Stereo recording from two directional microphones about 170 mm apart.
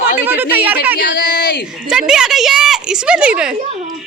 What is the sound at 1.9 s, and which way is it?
A woman's voice, 5° right (ahead or behind).